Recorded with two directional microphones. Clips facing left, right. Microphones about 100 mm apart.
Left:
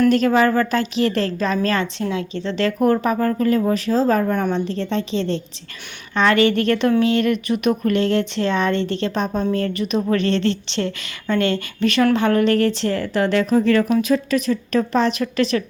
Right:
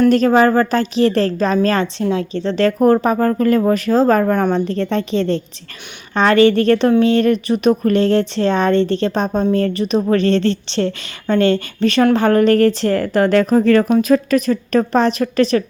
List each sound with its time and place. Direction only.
0.1 s speech: 40° right (ahead or behind)
6.1 s speech: 35° right (ahead or behind)